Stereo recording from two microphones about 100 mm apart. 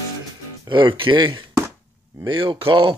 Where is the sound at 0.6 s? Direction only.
50° right (ahead or behind).